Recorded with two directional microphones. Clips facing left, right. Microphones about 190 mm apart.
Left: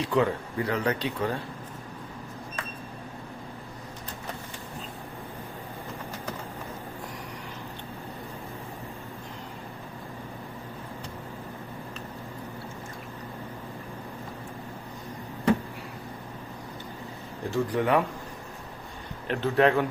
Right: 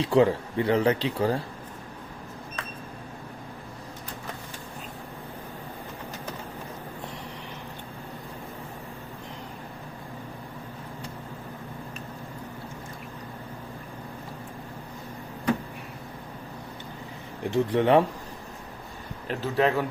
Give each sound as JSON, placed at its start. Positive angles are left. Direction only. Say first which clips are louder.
{"t": 0.0, "sound": "speech", "louder": "right 4 dB", "side_deg": -30}
{"t": 17.5, "sound": "speech", "louder": "right 4 dB", "side_deg": -25}
{"t": 19.3, "sound": "speech", "louder": "left 2 dB", "side_deg": -5}